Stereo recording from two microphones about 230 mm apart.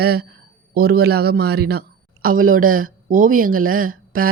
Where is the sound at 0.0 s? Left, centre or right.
Right.